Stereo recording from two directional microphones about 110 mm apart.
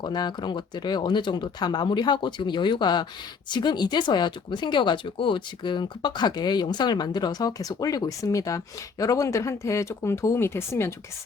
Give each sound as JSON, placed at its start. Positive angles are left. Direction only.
{"t": 0.0, "sound": "speech", "side_deg": 40}